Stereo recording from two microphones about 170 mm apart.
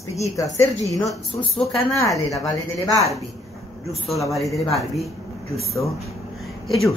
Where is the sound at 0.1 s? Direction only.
20° left (ahead or behind).